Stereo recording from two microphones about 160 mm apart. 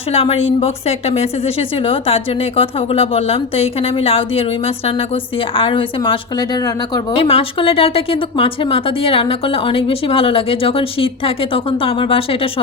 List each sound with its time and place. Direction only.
0.1 s a woman's voice: 40° left (ahead or behind)
7.2 s a woman's voice: 35° left (ahead or behind)